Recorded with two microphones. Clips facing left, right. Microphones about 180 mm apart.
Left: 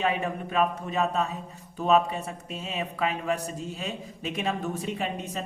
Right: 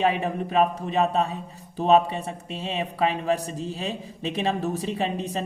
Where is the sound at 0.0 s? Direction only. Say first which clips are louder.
Right 4 dB; 35° right (ahead or behind).